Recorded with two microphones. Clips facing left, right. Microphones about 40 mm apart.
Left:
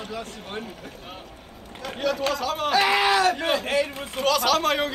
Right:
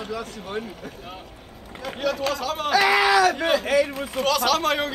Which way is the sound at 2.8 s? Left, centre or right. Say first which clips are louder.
Right 3 dB; right.